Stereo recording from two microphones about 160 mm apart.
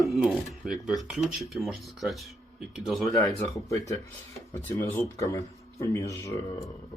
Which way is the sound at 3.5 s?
20° left (ahead or behind).